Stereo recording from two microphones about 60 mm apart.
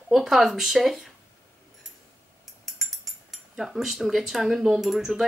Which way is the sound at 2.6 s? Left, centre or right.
Centre.